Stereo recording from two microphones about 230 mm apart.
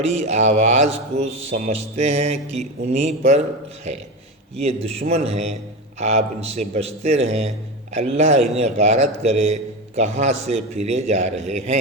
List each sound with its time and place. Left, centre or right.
0.0 s speech: right